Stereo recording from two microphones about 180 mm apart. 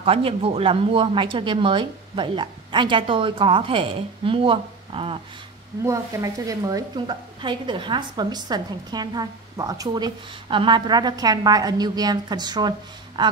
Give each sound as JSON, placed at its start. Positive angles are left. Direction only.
{"t": 0.0, "sound": "a woman's voice", "side_deg": -30}
{"t": 5.9, "sound": "a woman's voice", "side_deg": -20}